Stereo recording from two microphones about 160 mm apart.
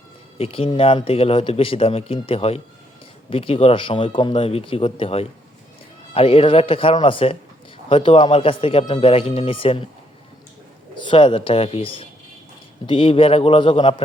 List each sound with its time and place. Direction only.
0.3 s a man's voice: 35° left (ahead or behind)
10.9 s a man's voice: 30° left (ahead or behind)